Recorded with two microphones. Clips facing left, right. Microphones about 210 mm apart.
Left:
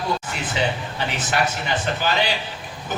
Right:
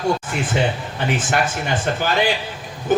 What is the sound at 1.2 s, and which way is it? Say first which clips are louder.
A man's voice: right 2 dB; 50° right (ahead or behind).